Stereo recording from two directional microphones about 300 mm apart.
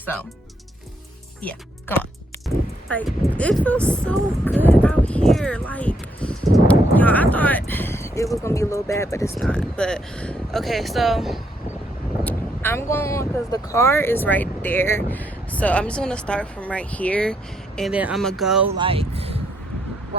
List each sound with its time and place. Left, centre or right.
2.9 s speech: centre
18.8 s speech: centre